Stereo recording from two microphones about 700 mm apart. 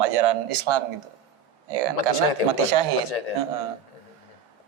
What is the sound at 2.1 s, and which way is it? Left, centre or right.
Speech, left.